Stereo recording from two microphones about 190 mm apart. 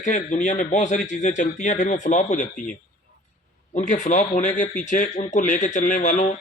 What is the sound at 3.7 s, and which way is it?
Speech, 40° left (ahead or behind).